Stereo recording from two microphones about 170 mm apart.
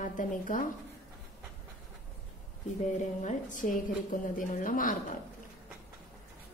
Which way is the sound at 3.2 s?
45° left (ahead or behind).